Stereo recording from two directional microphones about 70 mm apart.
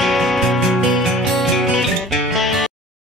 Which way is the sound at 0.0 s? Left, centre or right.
Centre.